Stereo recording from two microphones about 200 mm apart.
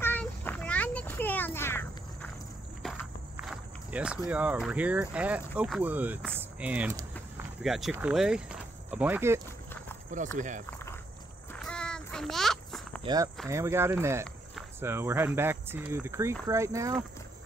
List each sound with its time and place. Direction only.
0.0 s a sound: 10° left (ahead or behind)
3.3 s walk: 5° right (ahead or behind)
4.3 s speech: 5° right (ahead or behind)
10.1 s speech: 40° right (ahead or behind)
10.7 s walk: 10° left (ahead or behind)
11.6 s a sound: 5° left (ahead or behind)
13.0 s speech: 20° right (ahead or behind)